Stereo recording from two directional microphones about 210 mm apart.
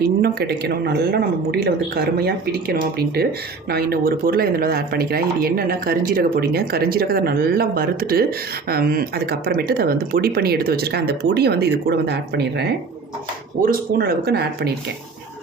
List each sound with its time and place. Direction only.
0.2 s speech: 50° right (ahead or behind)
13.7 s speech: 45° right (ahead or behind)